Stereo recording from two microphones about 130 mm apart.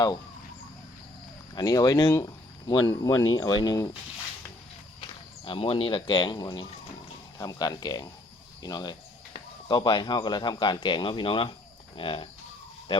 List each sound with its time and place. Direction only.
1.5 s speech: 30° left (ahead or behind)
5.5 s speech: 45° left (ahead or behind)